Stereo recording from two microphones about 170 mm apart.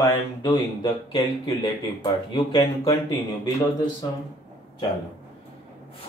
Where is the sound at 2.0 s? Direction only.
30° left (ahead or behind).